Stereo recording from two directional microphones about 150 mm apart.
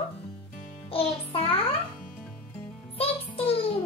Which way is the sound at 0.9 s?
40° left (ahead or behind).